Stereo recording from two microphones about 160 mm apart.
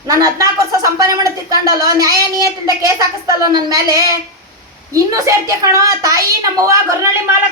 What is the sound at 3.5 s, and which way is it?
Speech, 25° right (ahead or behind).